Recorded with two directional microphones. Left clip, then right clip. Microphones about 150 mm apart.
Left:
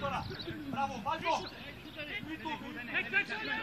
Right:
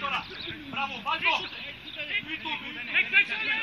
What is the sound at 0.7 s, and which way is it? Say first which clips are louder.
Speech: right 5 dB; 80° left.